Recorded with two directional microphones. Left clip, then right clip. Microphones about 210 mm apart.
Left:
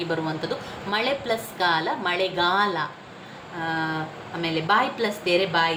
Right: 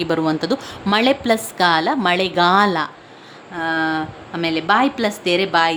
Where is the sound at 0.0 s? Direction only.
50° right (ahead or behind).